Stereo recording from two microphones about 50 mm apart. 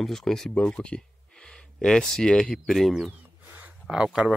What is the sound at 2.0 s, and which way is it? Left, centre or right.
Speech, centre.